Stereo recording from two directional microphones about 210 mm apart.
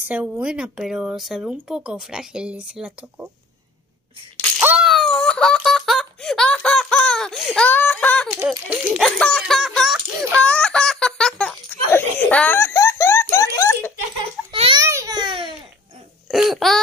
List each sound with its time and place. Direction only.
0.1 s speech: 5° right (ahead or behind)
4.6 s laughter: 5° right (ahead or behind)
8.3 s speech: 5° right (ahead or behind)
10.5 s laughter: 5° left (ahead or behind)
14.5 s a sound: 25° right (ahead or behind)
16.3 s speech: centre (ahead or behind)